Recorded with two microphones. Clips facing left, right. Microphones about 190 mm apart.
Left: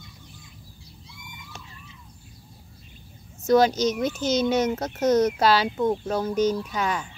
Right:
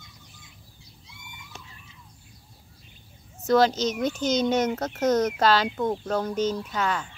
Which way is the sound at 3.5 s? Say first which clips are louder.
Left 2 dB; 10° left (ahead or behind).